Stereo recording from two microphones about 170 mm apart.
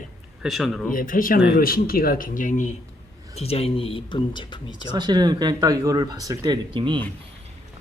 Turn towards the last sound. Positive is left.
turn(degrees=-30)  # may be behind; listen again after turning